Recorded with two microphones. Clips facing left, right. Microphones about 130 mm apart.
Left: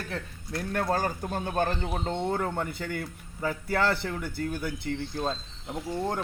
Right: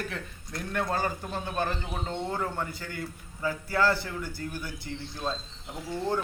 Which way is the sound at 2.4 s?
60° left (ahead or behind).